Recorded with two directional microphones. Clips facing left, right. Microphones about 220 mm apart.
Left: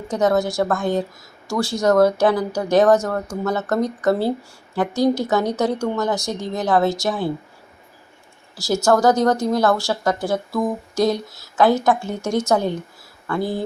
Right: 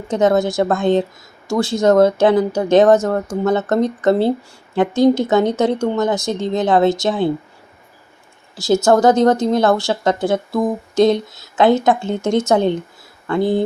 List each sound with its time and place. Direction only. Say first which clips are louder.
0.1 s a woman's voice: right 4 dB; 25° right (ahead or behind)
8.5 s a woman's voice: right 4 dB; 20° right (ahead or behind)